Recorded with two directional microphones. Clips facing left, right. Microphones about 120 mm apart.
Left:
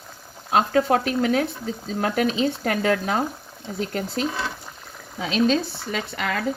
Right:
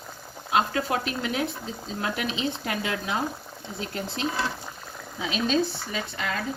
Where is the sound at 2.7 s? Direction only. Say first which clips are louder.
Left 7 dB; 45° left (ahead or behind).